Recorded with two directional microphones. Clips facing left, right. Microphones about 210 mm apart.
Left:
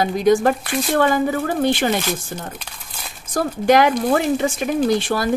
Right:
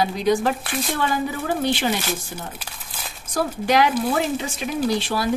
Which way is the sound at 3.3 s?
50° left (ahead or behind).